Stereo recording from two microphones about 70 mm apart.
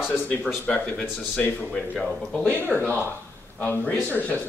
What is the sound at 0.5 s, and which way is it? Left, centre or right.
Speech, centre.